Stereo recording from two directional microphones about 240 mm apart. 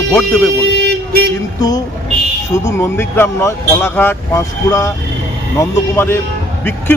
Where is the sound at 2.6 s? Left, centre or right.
Centre.